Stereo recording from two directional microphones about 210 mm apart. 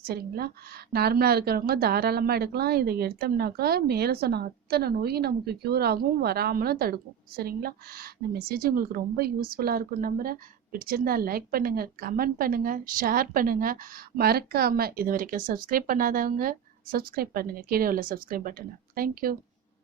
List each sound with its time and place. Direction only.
0.0 s a woman's voice: 45° right (ahead or behind)